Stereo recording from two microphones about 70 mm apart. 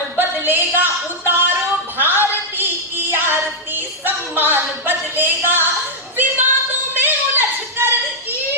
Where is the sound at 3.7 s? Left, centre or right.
Right.